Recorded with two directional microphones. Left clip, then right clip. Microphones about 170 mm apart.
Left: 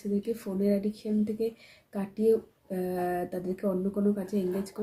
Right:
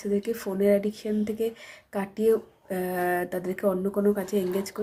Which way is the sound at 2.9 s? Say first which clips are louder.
Right 5 dB; 5° right (ahead or behind).